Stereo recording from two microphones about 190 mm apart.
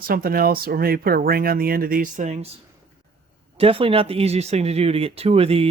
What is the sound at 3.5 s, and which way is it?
Speech, 30° right (ahead or behind).